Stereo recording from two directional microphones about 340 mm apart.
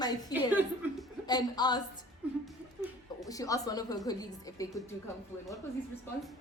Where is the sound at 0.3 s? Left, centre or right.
Centre.